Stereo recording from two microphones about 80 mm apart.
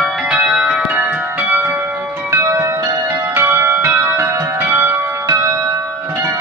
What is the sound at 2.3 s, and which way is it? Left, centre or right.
Bell, right.